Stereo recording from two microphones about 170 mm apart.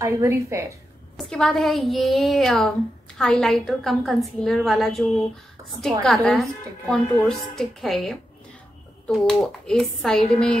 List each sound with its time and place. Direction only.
0.0 s a woman's voice: 15° right (ahead or behind)
1.1 s a woman's voice: 5° left (ahead or behind)